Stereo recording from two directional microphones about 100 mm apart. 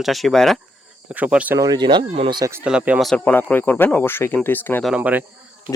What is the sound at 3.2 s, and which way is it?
Speech, 20° left (ahead or behind).